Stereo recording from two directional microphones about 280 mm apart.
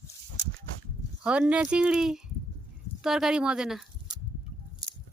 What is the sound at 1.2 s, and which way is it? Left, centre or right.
Speech, centre.